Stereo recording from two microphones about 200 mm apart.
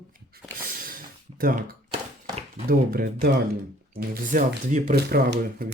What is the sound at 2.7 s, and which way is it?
Speech, 45° right (ahead or behind).